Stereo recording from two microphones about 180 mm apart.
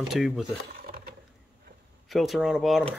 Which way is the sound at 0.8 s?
60° right (ahead or behind).